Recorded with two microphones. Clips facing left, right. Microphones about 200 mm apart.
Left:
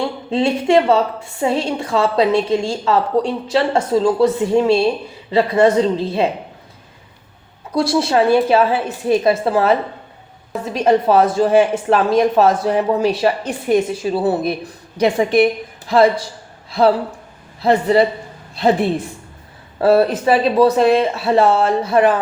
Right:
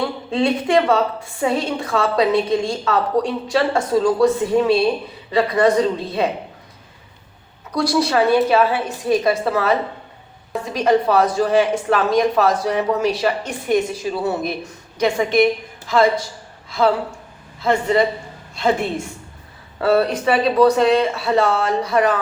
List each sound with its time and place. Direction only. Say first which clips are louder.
0.3 s speech: left 3 dB; 25° left (ahead or behind)
7.7 s speech: left 2 dB; 25° left (ahead or behind)
10.8 s a woman's voice: left 2 dB; 25° left (ahead or behind)